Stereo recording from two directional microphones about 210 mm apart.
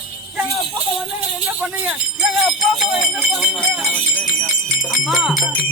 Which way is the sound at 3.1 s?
Centre (ahead or behind).